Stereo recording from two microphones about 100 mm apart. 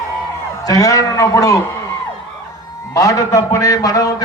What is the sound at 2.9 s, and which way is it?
A man's voice, 35° left (ahead or behind).